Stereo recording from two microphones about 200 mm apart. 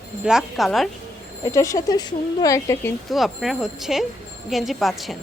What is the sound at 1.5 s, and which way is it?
Speech, 15° left (ahead or behind).